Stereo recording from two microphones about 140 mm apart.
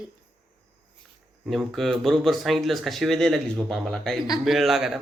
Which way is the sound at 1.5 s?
Centre (ahead or behind).